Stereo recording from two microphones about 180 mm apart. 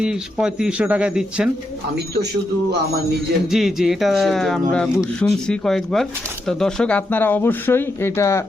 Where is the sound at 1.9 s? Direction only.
65° right (ahead or behind).